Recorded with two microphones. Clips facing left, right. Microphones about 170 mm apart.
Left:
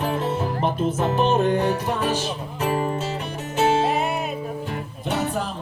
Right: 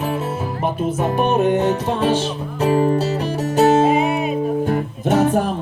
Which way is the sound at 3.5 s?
45° right (ahead or behind).